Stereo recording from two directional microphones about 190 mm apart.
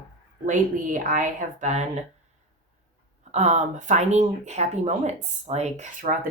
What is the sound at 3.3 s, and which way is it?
Speech, 35° right (ahead or behind).